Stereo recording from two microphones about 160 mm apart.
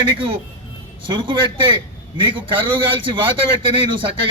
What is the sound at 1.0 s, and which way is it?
A man's voice, 30° right (ahead or behind).